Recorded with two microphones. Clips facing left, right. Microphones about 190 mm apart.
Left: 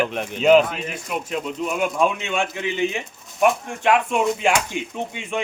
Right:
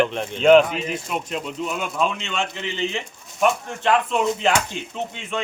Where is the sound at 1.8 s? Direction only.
15° left (ahead or behind).